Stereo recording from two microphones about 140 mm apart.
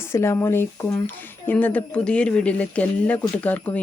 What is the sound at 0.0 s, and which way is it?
A woman's voice, 20° left (ahead or behind).